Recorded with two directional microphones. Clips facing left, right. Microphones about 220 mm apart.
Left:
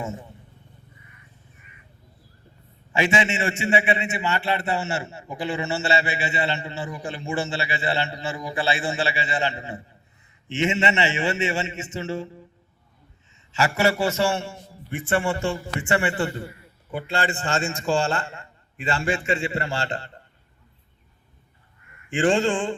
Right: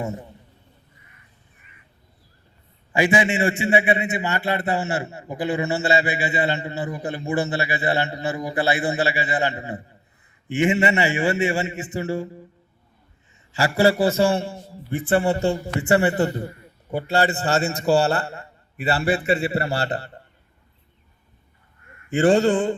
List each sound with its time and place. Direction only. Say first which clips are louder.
0.0 s a man's voice: right 3 dB; 35° right (ahead or behind)
3.3 s a man's voice: right 3 dB; 35° right (ahead or behind)
13.5 s a man's voice: right 3 dB; 35° right (ahead or behind)
22.1 s a man's voice: right 4 dB; 40° right (ahead or behind)